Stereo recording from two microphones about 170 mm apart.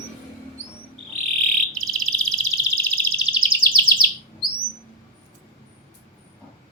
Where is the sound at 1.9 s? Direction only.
Centre (ahead or behind).